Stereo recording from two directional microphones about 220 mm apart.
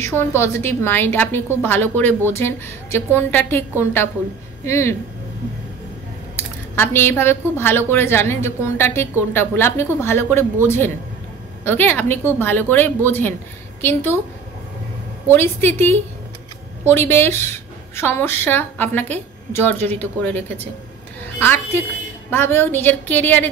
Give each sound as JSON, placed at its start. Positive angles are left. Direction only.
{"t": 0.0, "sound": "a woman's voice", "side_deg": 10}
{"t": 6.3, "sound": "a woman's voice", "side_deg": 10}
{"t": 11.6, "sound": "a woman's voice", "side_deg": 10}
{"t": 15.3, "sound": "a woman's voice", "side_deg": 10}